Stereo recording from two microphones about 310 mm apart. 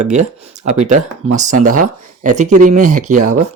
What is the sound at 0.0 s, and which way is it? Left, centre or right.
Speech, right.